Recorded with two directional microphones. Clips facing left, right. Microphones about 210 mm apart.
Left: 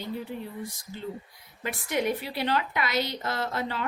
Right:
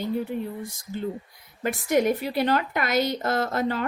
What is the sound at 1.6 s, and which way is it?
A woman's voice, 45° right (ahead or behind).